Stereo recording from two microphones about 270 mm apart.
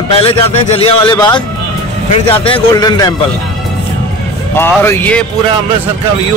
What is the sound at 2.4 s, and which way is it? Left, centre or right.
Speech, centre.